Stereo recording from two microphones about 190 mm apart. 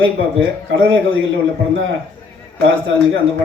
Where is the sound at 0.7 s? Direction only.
75° right (ahead or behind).